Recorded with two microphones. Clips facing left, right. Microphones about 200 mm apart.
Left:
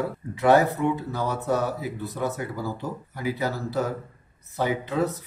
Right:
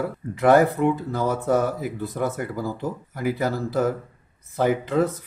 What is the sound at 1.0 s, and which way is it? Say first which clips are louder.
Speech: right 4 dB; 50° right (ahead or behind).